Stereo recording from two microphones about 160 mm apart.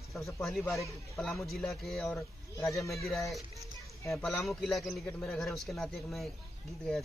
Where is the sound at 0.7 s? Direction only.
Centre (ahead or behind).